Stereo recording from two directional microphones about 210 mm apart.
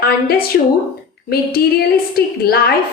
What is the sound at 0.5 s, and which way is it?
Speech, 60° left (ahead or behind).